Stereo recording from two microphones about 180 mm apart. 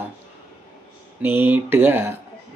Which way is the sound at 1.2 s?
10° right (ahead or behind).